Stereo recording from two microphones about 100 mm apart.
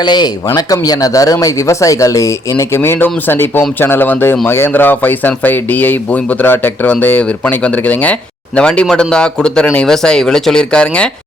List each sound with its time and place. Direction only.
0.0 s speech: 45° left (ahead or behind); by 11.1 s 10° left (ahead or behind)